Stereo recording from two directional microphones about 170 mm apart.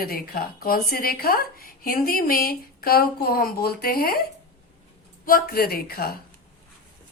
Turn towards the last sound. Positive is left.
turn(degrees=60)  # may be behind; listen again after turning